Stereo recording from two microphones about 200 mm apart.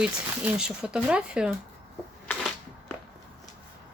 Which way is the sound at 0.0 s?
5° right (ahead or behind).